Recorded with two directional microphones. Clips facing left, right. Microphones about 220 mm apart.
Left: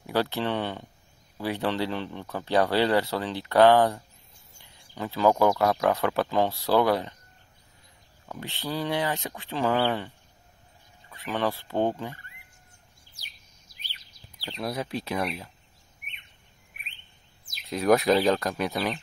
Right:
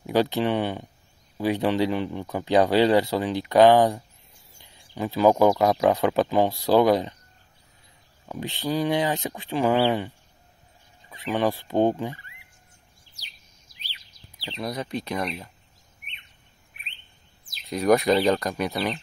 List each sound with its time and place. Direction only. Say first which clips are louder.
0.0 s speech: right 5 dB; 15° right (ahead or behind)
8.3 s speech: right 6 dB; 15° right (ahead or behind)
13.7 s bird: right 2 dB; 50° left (ahead or behind)
14.6 s speech: right 1 dB; 5° left (ahead or behind)
17.6 s speech: right 1 dB; centre (ahead or behind)